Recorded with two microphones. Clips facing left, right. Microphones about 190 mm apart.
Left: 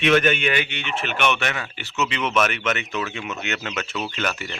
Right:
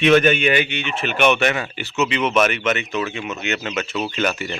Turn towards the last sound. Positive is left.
turn(degrees=-10)  # may be behind; listen again after turning